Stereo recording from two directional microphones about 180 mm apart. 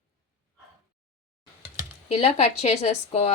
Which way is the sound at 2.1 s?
35° left (ahead or behind).